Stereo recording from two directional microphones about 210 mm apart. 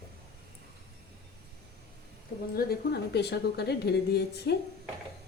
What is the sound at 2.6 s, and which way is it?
A woman's voice, 50° left (ahead or behind).